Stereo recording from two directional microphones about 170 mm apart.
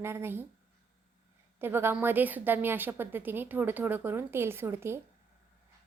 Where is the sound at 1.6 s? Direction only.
15° right (ahead or behind).